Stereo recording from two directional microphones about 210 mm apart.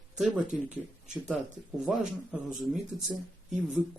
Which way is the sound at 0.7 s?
35° right (ahead or behind).